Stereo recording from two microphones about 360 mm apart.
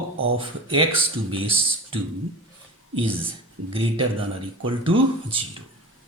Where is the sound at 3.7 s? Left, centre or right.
Centre.